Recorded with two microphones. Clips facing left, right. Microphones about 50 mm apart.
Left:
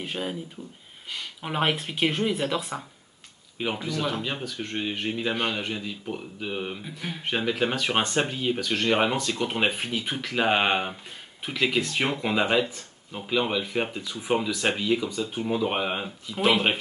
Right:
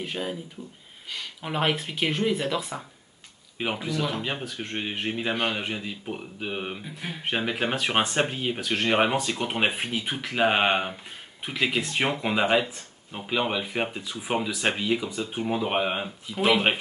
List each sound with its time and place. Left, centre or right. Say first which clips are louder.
0.0 s speech: even; centre
1.4 s speech: even; centre
3.6 s speech: even; centre